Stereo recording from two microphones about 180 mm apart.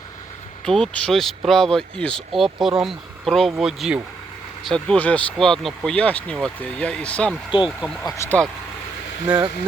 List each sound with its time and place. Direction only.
0.6 s speech: 5° left (ahead or behind)
7.5 s speech: 30° left (ahead or behind)
8.0 s speech: 15° left (ahead or behind)
9.2 s speech: 25° right (ahead or behind)